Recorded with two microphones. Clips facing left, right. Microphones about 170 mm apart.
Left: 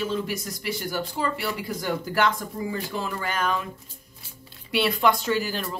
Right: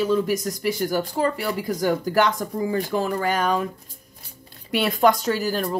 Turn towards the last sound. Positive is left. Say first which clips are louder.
# right 3 dB
turn(degrees=-45)  # may be behind; listen again after turning